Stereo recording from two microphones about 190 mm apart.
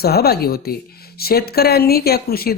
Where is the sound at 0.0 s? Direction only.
55° left (ahead or behind).